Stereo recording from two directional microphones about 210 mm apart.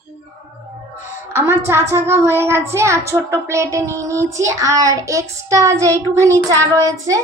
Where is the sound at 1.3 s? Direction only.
10° right (ahead or behind).